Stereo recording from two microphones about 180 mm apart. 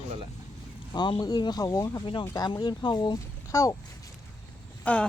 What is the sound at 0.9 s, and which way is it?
Speech, 25° left (ahead or behind).